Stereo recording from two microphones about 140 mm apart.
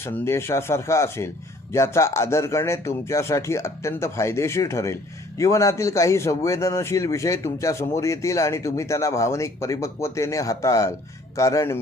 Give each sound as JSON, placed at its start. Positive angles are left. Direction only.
{"t": 0.0, "sound": "a man's voice", "side_deg": 20}